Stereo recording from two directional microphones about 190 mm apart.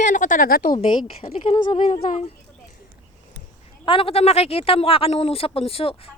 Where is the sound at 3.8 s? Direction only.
30° left (ahead or behind).